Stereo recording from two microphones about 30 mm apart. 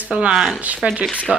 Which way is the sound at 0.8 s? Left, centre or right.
Right.